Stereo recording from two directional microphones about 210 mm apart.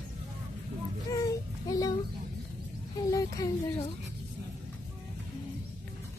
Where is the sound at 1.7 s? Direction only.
15° left (ahead or behind).